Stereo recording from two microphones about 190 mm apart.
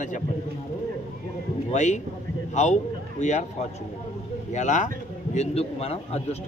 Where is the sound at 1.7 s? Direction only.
40° left (ahead or behind).